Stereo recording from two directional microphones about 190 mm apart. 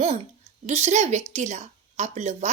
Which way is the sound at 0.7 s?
35° right (ahead or behind).